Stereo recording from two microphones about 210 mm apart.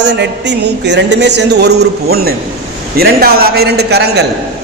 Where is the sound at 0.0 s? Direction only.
55° right (ahead or behind).